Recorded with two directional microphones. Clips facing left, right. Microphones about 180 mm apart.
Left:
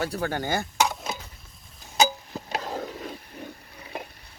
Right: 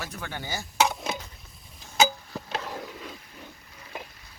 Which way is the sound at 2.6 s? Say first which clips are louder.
Left 4 dB; 40° left (ahead or behind).